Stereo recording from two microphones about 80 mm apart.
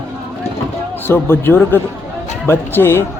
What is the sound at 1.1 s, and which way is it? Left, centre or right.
Speech, left.